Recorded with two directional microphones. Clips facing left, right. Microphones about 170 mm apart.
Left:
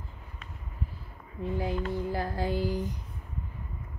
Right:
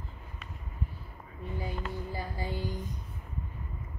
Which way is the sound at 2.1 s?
90° left.